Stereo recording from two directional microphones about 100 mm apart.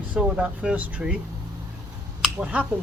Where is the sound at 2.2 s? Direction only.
15° right (ahead or behind).